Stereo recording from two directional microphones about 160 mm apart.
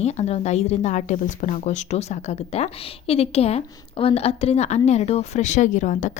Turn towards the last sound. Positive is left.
turn(degrees=50)  # may be behind; listen again after turning